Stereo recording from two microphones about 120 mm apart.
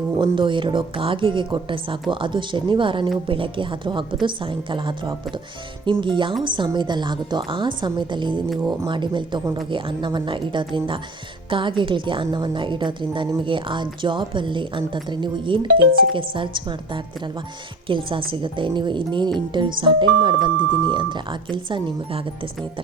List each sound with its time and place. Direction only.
0.2 s a woman's voice: 40° right (ahead or behind)